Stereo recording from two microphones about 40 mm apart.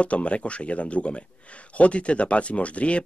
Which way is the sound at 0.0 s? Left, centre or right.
Left.